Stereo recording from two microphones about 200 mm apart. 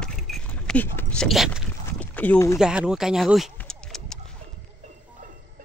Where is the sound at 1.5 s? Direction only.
10° left (ahead or behind).